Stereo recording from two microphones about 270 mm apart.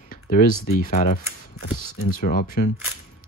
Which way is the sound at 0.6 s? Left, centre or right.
Left.